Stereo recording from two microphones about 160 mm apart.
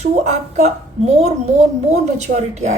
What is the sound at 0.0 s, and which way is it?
A woman's voice, 45° right (ahead or behind).